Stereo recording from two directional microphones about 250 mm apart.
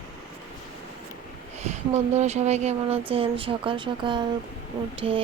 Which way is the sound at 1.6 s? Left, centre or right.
Right.